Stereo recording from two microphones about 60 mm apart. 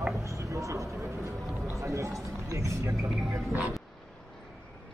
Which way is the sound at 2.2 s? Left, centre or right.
Right.